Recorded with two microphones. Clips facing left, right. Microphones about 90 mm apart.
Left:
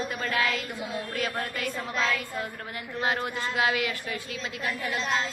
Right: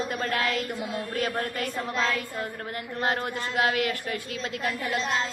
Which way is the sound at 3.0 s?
45° right (ahead or behind).